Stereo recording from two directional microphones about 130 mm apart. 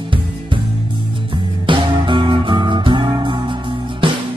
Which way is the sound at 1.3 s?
40° right (ahead or behind).